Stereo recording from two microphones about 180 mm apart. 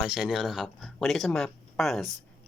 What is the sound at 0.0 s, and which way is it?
Speech, 5° right (ahead or behind).